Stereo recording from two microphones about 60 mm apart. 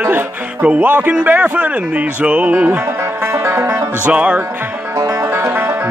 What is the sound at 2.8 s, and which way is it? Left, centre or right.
Music, right.